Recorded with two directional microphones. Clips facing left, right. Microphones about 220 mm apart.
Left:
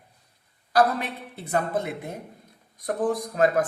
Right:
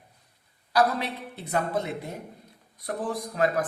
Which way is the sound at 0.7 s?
50° left (ahead or behind).